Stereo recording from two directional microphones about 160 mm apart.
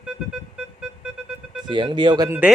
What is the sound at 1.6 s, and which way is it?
Speech, 30° right (ahead or behind).